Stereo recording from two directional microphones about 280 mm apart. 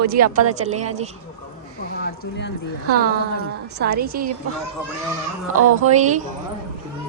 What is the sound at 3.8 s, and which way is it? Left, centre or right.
Speech, right.